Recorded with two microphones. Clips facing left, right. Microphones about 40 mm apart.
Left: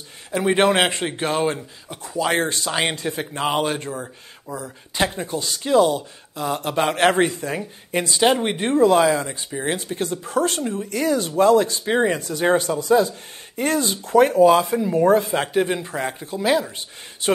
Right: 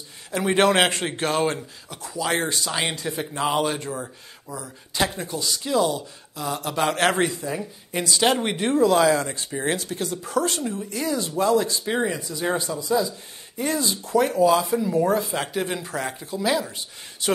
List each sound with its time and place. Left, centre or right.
0.6 s speech: centre
1.9 s speech: left
3.9 s speech: centre
4.6 s speech: left
7.2 s speech: left
8.2 s speech: centre
9.8 s speech: left
11.8 s speech: left
12.2 s speech: left